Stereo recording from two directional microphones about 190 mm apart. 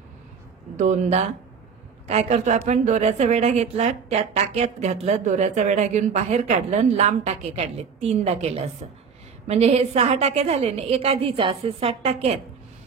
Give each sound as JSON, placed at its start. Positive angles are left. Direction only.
{"t": 0.7, "sound": "a woman's voice", "side_deg": -35}